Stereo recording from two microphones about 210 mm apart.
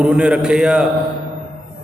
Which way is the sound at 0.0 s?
5° right (ahead or behind).